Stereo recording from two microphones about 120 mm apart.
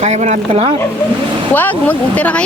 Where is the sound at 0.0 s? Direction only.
70° right (ahead or behind).